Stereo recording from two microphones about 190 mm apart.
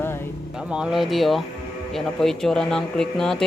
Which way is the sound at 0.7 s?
5° right (ahead or behind).